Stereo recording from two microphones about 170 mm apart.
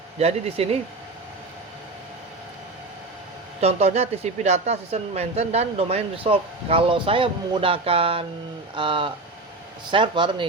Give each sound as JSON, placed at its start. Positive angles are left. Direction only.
{"t": 0.2, "sound": "a man's voice", "side_deg": -35}
{"t": 3.6, "sound": "a man's voice", "side_deg": -40}